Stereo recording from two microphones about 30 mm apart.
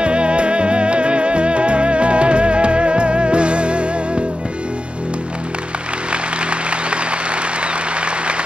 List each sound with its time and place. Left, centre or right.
0.0 s music: right
6.5 s music: right
7.6 s applause: right